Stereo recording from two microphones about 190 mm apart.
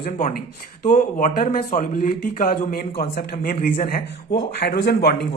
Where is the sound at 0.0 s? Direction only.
45° left (ahead or behind).